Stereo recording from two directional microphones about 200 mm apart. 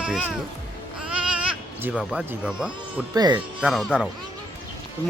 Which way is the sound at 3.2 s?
20° right (ahead or behind).